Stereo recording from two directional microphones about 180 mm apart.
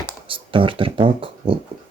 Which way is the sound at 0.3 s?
30° right (ahead or behind).